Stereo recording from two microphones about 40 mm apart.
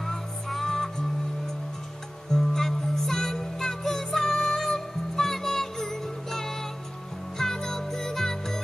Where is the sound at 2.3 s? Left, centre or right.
Centre.